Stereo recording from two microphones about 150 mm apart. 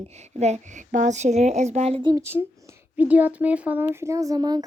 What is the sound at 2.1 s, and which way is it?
Speech, 15° right (ahead or behind).